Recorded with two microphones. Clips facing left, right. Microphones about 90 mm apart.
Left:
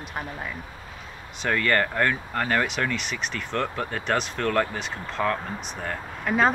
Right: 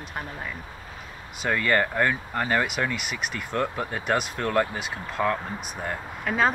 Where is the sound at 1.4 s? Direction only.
10° right (ahead or behind).